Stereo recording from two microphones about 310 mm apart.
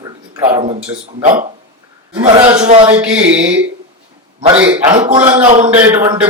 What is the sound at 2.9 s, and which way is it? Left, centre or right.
Speech, centre.